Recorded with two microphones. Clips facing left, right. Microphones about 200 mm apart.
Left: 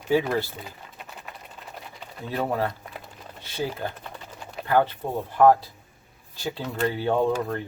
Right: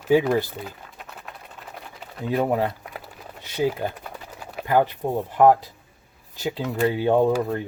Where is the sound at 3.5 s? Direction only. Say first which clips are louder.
Right 6 dB; 15° right (ahead or behind).